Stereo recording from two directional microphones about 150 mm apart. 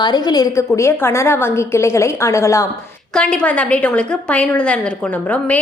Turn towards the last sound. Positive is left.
turn(degrees=10)  # may be behind; listen again after turning